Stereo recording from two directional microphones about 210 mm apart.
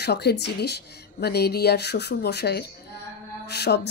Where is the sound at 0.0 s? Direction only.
50° left (ahead or behind).